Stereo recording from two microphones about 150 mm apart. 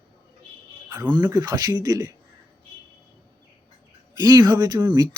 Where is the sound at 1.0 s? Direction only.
30° right (ahead or behind).